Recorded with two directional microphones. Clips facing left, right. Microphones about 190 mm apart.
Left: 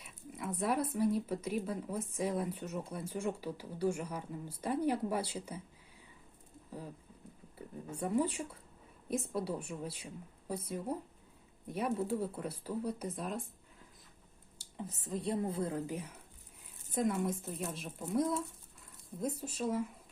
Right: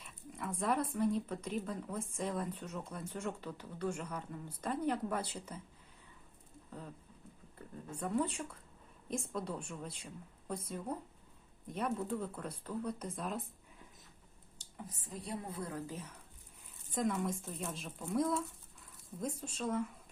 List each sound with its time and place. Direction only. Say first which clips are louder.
0.0 s speech: left 1 dB; 10° left (ahead or behind)
6.7 s patter: left 3 dB; 10° left (ahead or behind)
7.9 s a woman's voice: left 3 dB; 10° left (ahead or behind)
14.8 s a woman's voice: left 7 dB; 25° left (ahead or behind)
16.9 s a woman's voice: left 2 dB; 5° left (ahead or behind)
19.5 s speech: left 1 dB; 5° left (ahead or behind)